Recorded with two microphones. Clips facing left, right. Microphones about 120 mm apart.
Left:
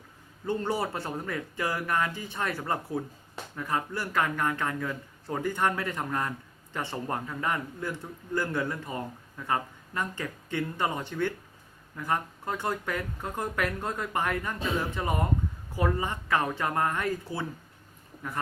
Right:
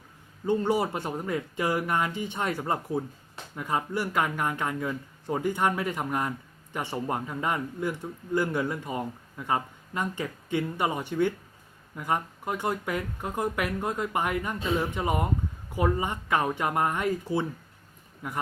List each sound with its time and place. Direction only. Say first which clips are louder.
0.4 s speech: right 4 dB; 15° right (ahead or behind)